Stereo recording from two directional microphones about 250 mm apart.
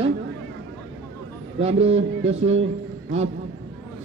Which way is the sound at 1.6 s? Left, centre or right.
Right.